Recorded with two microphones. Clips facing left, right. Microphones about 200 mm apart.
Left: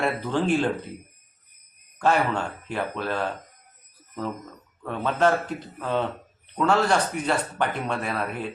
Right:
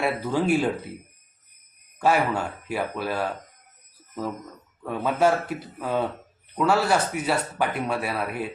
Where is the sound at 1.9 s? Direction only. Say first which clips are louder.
Even; 10° right (ahead or behind).